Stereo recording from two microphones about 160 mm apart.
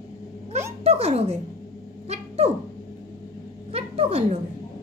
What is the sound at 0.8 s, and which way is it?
Speech, 40° right (ahead or behind).